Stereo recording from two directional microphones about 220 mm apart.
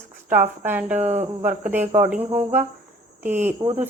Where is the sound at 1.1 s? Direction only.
30° right (ahead or behind).